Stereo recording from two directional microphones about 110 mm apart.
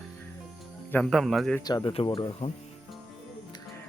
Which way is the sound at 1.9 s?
55° left (ahead or behind).